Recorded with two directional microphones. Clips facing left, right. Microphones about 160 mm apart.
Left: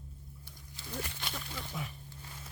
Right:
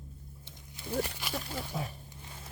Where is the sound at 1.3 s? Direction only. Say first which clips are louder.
Right 7 dB; 40° right (ahead or behind).